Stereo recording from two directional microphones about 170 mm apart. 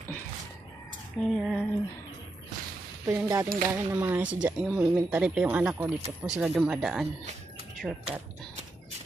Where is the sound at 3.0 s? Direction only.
15° right (ahead or behind).